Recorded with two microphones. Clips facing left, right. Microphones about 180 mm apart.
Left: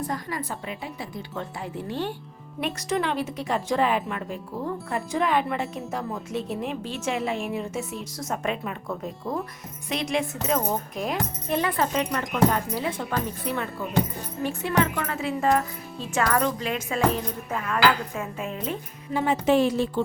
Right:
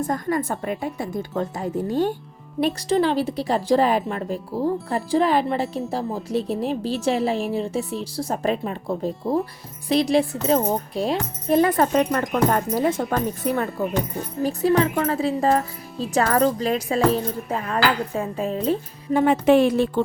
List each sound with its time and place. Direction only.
0.0 s a woman's voice: 50° right (ahead or behind)
19.1 s a woman's voice: 55° right (ahead or behind)